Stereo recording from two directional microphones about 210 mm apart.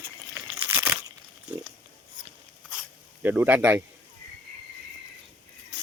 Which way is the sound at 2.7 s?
5° right (ahead or behind).